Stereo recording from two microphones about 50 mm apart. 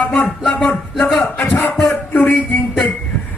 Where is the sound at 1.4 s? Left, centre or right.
Left.